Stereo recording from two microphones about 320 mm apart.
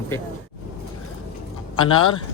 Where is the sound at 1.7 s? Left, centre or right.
Centre.